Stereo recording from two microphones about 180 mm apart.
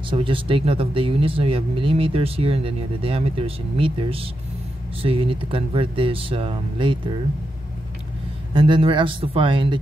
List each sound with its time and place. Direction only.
0.1 s speech: 30° right (ahead or behind)
8.5 s speech: 25° right (ahead or behind)